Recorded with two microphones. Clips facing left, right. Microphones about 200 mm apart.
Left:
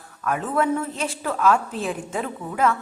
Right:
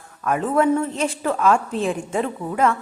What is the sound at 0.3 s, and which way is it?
A woman's voice, centre (ahead or behind).